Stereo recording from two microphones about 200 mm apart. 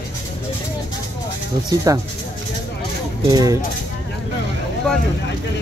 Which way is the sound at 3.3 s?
20° right (ahead or behind).